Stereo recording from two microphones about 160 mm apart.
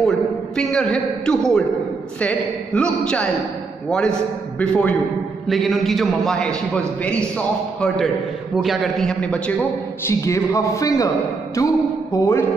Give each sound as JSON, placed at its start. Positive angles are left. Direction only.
{"t": 0.6, "sound": "a man's voice", "side_deg": 5}